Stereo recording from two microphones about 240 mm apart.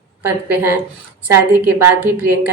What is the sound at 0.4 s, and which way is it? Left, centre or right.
Speech, centre.